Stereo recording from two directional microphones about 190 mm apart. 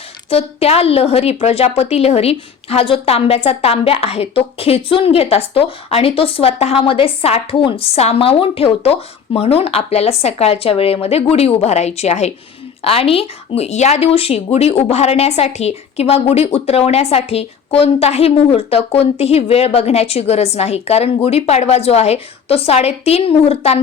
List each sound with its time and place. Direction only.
0.3 s a woman's voice: 30° left (ahead or behind)